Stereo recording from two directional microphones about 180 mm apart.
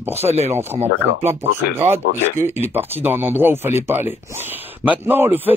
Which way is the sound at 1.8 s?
15° right (ahead or behind).